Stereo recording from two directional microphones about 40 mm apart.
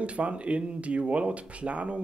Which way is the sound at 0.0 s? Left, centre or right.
Right.